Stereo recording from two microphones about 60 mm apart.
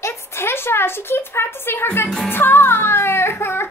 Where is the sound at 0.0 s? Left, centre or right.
Left.